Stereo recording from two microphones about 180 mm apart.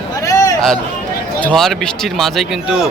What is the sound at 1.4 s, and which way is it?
Speech, 5° left (ahead or behind).